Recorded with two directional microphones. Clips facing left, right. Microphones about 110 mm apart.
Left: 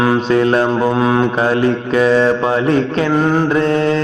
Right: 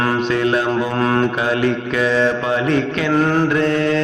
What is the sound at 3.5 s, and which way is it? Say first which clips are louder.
Mantra: left 2 dB; 30° left (ahead or behind).